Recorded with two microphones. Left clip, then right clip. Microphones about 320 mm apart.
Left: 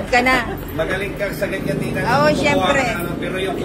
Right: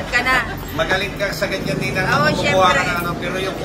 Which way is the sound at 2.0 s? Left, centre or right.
Centre.